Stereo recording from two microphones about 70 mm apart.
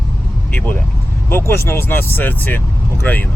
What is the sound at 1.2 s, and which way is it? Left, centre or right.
Speech, left.